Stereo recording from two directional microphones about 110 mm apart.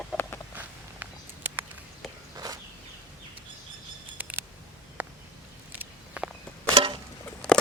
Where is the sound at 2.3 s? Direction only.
35° right (ahead or behind).